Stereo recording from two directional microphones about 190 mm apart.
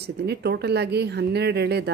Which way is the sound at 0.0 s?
60° right (ahead or behind).